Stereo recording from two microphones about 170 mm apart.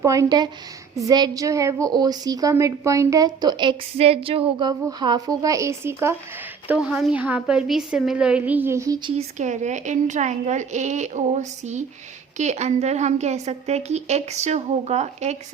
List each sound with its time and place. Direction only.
0.0 s a woman's voice: 20° right (ahead or behind)
9.0 s a woman's voice: 40° right (ahead or behind)